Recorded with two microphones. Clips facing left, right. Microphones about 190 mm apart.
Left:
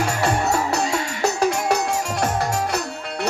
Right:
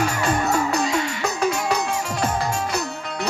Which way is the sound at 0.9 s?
45° left (ahead or behind).